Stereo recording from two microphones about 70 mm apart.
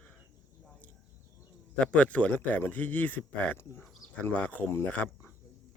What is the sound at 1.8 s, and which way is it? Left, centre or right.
A man's voice, centre.